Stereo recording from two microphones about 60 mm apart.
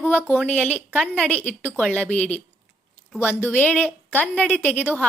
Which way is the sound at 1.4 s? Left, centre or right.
Left.